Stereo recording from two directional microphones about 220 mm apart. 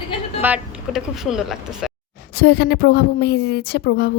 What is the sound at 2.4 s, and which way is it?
A woman's voice, 45° left (ahead or behind).